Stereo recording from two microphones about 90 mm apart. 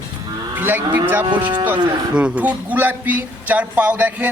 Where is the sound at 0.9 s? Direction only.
20° right (ahead or behind).